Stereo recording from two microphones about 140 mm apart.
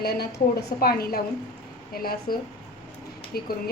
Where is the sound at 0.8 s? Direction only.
90° left.